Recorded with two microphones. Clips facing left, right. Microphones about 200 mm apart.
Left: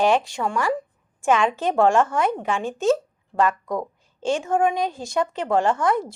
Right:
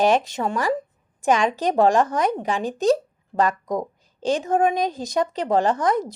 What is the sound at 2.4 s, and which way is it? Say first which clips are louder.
Speech: right 1 dB; 35° right (ahead or behind).